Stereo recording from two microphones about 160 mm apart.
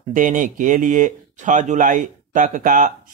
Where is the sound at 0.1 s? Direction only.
55° right (ahead or behind).